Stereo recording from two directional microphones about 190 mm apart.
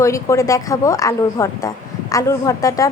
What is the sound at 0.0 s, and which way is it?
A woman's voice, 15° left (ahead or behind).